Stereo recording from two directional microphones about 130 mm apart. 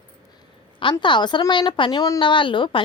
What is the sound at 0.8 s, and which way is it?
A woman's voice, 40° left (ahead or behind).